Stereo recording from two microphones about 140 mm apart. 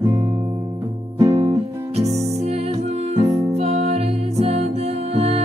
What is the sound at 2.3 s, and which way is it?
Music, 50° right (ahead or behind).